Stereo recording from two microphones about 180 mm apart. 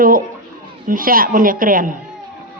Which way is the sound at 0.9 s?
50° right (ahead or behind).